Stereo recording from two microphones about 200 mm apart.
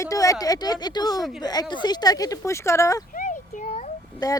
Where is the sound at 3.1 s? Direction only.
40° left (ahead or behind).